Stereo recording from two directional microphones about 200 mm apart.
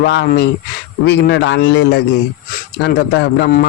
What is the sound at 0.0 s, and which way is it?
A man's voice, 55° left (ahead or behind).